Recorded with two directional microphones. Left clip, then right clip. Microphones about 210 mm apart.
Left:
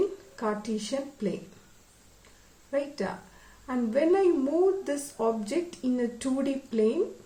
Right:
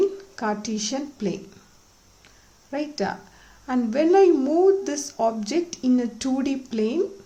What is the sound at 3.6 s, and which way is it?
Speech, 55° right (ahead or behind).